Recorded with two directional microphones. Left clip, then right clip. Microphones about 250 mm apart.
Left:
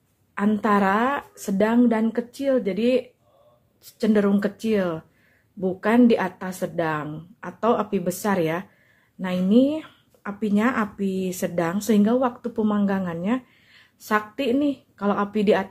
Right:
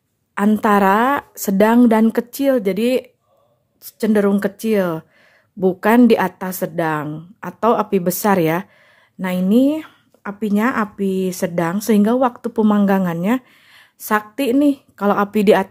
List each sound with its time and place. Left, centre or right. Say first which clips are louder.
0.3 s a woman's voice: right 6 dB; right